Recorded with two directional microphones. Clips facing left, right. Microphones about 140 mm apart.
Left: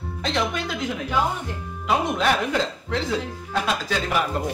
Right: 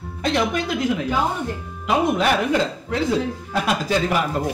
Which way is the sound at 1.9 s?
5° right (ahead or behind).